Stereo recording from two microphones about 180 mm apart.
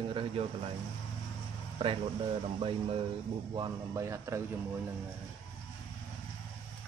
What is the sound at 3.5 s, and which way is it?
Speech, 20° right (ahead or behind).